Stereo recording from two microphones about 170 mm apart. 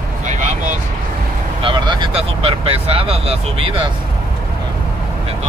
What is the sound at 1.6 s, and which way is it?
Speech, 30° right (ahead or behind).